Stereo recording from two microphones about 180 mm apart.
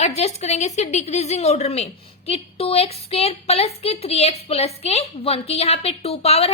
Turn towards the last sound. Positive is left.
turn(degrees=35)  # may be behind; listen again after turning